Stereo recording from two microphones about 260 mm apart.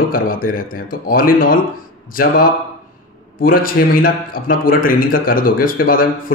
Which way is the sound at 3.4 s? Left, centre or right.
Left.